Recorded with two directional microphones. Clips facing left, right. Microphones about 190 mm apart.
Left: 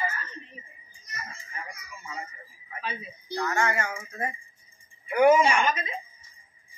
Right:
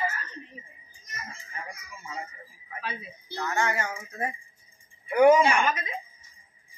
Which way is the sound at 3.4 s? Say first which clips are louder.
Even; 15° right (ahead or behind).